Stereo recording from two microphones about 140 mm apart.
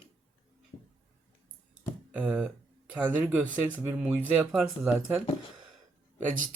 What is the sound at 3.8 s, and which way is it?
Speech, 10° right (ahead or behind).